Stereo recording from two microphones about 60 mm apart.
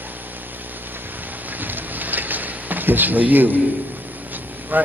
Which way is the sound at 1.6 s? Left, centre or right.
Right.